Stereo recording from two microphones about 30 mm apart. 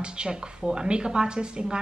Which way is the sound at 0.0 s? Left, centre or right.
Right.